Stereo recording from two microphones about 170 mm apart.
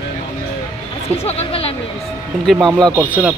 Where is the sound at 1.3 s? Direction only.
35° left (ahead or behind).